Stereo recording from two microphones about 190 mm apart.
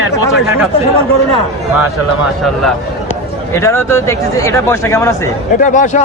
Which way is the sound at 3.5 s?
15° left (ahead or behind).